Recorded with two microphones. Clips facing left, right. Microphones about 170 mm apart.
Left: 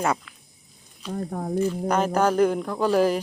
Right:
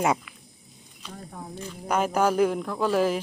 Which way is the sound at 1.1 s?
55° left (ahead or behind).